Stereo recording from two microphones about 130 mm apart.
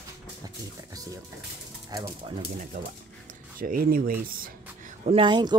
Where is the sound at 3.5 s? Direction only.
90° right.